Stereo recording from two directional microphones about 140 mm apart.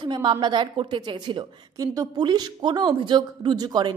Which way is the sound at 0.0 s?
35° right (ahead or behind).